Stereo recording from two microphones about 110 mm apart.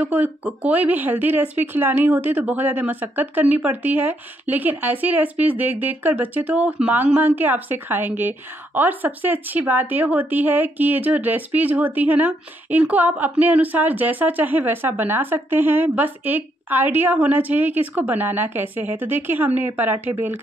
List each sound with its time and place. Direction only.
0.0 s speech: 15° right (ahead or behind)